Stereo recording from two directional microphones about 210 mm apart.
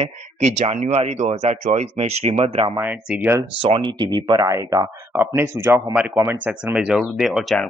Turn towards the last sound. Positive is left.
turn(degrees=0)  # may be behind; listen again after turning